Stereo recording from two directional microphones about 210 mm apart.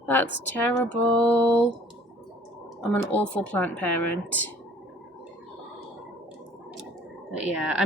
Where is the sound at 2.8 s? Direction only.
5° left (ahead or behind).